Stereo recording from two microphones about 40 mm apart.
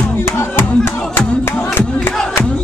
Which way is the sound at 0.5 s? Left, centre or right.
Left.